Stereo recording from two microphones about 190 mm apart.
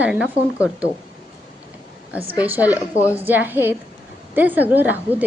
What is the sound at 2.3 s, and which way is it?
A woman's voice, 10° right (ahead or behind).